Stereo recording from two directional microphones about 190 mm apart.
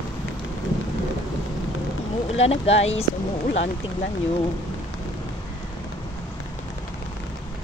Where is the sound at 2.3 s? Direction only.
35° left (ahead or behind).